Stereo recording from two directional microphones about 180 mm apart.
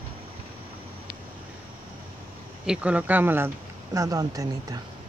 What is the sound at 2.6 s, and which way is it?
Speech, 5° right (ahead or behind).